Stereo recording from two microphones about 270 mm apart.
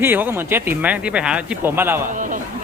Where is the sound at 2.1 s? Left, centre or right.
Right.